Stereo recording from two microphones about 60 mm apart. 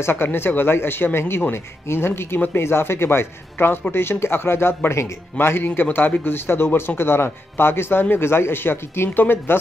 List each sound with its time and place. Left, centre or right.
0.0 s a man's voice: left